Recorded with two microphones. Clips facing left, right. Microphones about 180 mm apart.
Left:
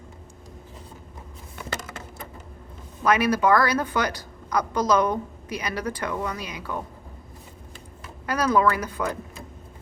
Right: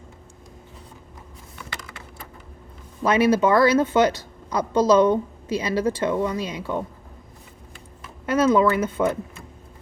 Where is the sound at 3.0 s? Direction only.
25° right (ahead or behind).